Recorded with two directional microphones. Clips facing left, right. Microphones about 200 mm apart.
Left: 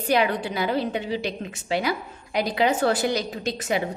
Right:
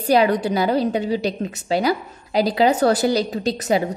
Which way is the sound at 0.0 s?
40° right (ahead or behind).